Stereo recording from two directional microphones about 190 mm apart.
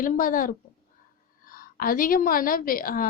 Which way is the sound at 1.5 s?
50° left (ahead or behind).